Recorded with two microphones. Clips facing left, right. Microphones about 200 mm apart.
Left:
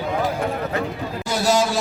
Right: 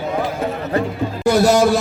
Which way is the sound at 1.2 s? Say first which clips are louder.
Right 7 dB; 60° right (ahead or behind).